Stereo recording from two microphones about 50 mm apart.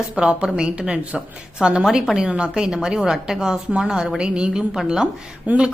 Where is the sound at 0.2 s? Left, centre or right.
Centre.